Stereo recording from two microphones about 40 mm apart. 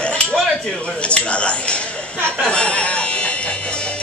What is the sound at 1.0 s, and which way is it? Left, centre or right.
Speech, left.